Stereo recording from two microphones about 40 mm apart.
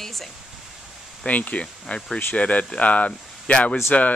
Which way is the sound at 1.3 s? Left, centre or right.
Left.